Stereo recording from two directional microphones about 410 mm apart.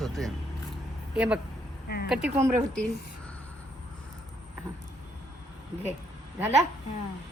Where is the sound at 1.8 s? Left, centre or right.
Left.